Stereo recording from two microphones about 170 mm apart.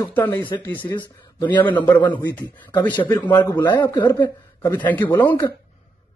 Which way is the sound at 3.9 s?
20° left (ahead or behind).